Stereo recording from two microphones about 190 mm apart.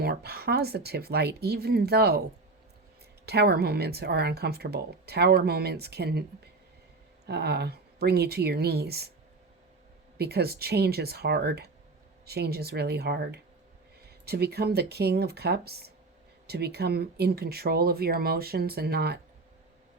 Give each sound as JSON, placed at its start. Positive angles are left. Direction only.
{"t": 0.0, "sound": "speech", "side_deg": -55}
{"t": 3.2, "sound": "speech", "side_deg": -60}
{"t": 10.2, "sound": "speech", "side_deg": -55}